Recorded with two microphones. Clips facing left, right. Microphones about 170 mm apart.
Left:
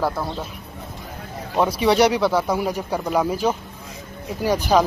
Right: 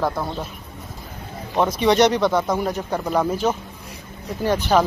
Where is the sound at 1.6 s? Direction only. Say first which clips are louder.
Even; 5° left (ahead or behind).